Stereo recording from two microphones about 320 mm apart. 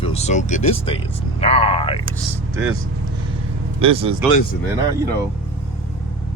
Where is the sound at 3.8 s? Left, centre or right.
Centre.